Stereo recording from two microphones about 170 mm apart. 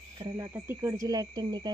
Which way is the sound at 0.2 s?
20° right (ahead or behind).